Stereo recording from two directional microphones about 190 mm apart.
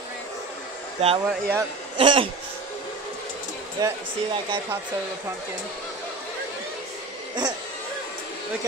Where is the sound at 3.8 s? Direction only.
20° right (ahead or behind).